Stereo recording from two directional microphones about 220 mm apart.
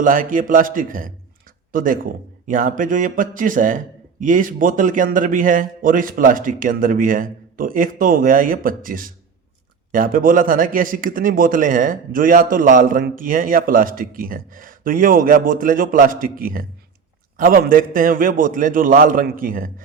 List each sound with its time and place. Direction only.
0.0 s a man's voice: 35° right (ahead or behind)